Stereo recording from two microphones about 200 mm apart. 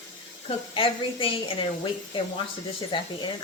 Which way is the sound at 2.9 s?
25° left (ahead or behind).